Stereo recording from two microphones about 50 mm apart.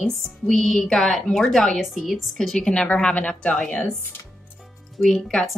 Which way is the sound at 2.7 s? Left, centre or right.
Centre.